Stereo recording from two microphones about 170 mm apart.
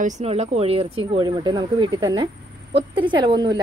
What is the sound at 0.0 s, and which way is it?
Speech, 40° right (ahead or behind).